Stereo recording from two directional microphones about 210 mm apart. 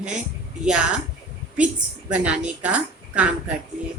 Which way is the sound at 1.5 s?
5° right (ahead or behind).